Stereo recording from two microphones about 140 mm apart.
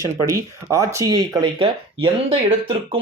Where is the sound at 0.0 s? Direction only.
20° right (ahead or behind).